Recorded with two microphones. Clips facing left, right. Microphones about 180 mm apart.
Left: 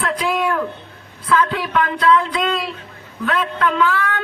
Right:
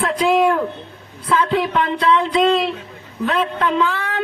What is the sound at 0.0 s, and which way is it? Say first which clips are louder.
Speech: right 5 dB; 30° right (ahead or behind).